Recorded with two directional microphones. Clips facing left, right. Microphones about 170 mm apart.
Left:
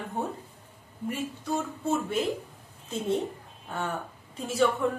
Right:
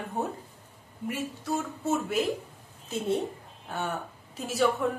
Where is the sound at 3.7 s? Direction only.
5° right (ahead or behind).